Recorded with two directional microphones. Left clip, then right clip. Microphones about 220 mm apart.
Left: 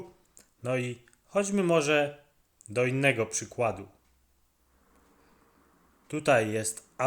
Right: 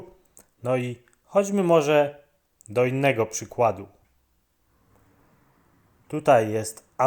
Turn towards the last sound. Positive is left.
turn(degrees=-10)  # may be behind; listen again after turning